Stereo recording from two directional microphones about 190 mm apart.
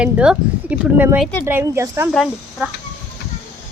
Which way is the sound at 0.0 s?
5° right (ahead or behind).